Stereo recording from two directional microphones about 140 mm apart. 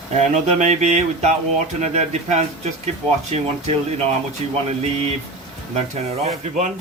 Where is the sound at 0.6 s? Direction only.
55° right (ahead or behind).